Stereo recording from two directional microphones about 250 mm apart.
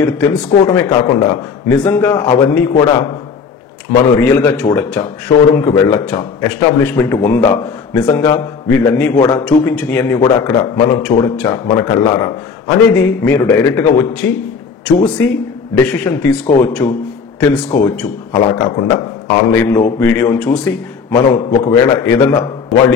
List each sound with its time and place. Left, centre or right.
0.0 s speech: centre
0.8 s a man's voice: centre
4.2 s a man's voice: centre
10.2 s a man's voice: centre
15.2 s a man's voice: centre
18.3 s a man's voice: centre
21.1 s a man's voice: centre